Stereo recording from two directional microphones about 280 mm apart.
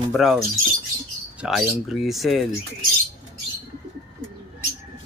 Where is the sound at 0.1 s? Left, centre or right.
Centre.